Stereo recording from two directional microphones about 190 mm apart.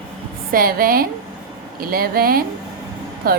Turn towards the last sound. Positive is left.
turn(degrees=-50)  # may be behind; listen again after turning